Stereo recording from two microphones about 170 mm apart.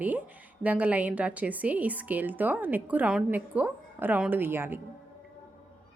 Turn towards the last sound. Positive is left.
turn(degrees=-15)  # may be behind; listen again after turning